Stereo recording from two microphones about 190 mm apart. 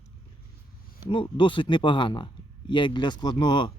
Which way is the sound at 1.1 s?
25° left (ahead or behind).